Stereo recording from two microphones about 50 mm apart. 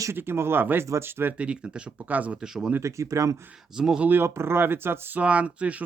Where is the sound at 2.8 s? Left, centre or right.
Right.